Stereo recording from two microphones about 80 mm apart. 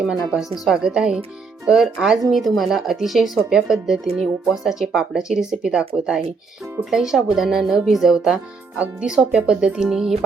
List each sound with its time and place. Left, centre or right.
0.6 s speech: centre